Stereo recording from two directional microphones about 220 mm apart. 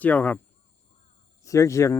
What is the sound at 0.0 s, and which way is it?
Speech, 5° left (ahead or behind).